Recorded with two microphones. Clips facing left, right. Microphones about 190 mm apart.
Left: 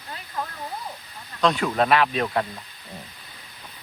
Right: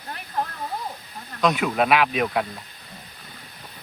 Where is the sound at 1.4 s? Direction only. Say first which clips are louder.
Even; 5° right (ahead or behind).